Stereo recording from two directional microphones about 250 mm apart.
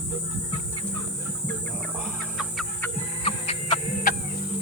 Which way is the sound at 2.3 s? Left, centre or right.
Centre.